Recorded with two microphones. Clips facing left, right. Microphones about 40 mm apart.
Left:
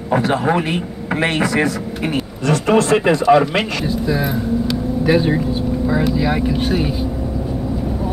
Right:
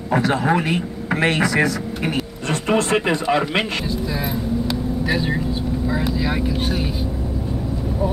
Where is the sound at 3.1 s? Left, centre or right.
Centre.